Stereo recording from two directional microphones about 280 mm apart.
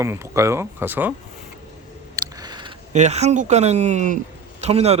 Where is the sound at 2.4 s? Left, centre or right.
Centre.